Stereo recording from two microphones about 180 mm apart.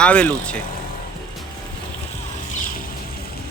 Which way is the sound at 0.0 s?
5° left (ahead or behind).